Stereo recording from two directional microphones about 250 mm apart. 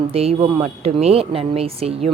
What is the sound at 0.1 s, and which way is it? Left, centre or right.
A woman's voice, right.